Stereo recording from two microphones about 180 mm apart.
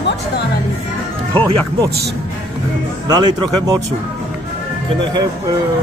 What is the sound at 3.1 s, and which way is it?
Speech, 25° right (ahead or behind).